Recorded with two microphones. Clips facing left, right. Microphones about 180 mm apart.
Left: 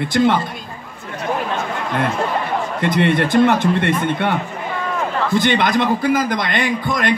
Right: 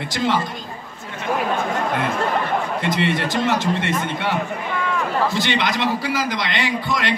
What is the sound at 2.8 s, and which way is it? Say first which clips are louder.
A man's voice: left 4 dB; 55° left (ahead or behind).